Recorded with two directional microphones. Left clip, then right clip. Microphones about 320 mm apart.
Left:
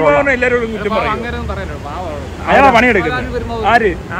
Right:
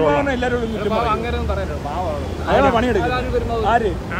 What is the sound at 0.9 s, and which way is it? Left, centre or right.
Speech, left.